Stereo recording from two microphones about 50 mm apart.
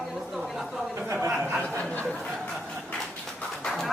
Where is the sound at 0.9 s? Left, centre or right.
Right.